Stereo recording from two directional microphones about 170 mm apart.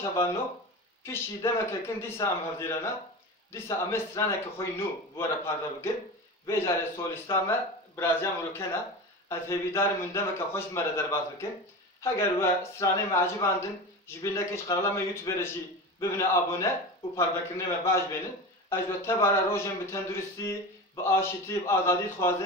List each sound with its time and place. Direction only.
1.0 s a man's voice: 15° left (ahead or behind)
17.8 s a man's voice: 15° left (ahead or behind)